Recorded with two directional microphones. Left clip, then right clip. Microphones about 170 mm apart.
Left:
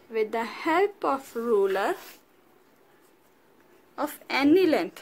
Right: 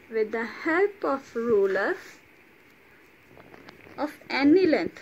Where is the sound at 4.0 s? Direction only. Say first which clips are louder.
Even; 50° left (ahead or behind).